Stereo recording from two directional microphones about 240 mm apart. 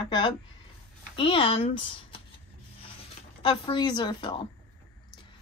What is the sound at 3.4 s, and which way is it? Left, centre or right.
Speech, centre.